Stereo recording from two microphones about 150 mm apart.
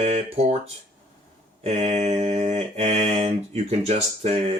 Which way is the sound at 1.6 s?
45° right (ahead or behind).